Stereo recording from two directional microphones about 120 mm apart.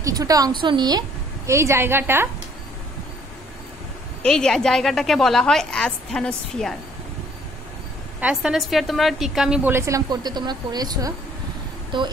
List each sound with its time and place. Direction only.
0.0 s a woman's voice: 30° right (ahead or behind)
1.5 s a woman's voice: 20° right (ahead or behind)
4.2 s a woman's voice: 5° left (ahead or behind)
8.2 s a woman's voice: 5° right (ahead or behind)
9.6 s speech: 20° right (ahead or behind); by 12.1 s 40° right (ahead or behind)